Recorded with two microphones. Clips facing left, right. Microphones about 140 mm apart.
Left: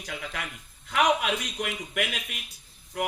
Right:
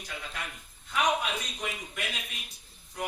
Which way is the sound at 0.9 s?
80° left.